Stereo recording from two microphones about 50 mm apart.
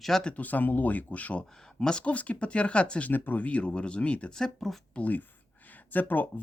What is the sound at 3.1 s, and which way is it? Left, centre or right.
Speech, left.